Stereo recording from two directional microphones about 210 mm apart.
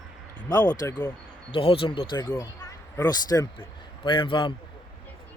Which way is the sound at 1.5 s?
25° left (ahead or behind).